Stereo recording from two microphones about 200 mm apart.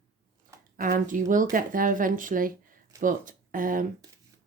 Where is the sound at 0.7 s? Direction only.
45° right (ahead or behind).